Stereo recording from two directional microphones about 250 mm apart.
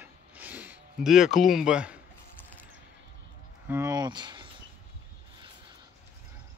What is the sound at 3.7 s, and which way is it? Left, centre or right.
Speech, centre.